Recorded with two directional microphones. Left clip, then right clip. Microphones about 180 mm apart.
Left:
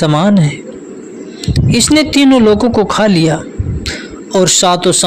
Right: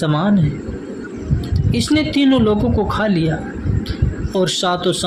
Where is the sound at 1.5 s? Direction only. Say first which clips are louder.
Left 8 dB; 50° left (ahead or behind).